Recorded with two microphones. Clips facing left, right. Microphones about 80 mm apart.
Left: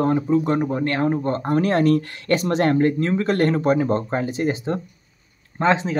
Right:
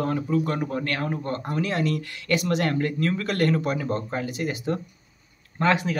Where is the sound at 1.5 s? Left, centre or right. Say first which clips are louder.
Left 9 dB; left.